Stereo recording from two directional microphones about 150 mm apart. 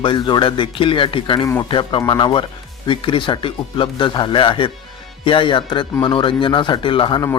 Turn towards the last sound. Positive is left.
turn(degrees=35)  # may be behind; listen again after turning